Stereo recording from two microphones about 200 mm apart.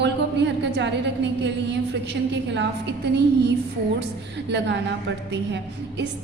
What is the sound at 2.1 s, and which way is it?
A woman's voice, 60° right (ahead or behind).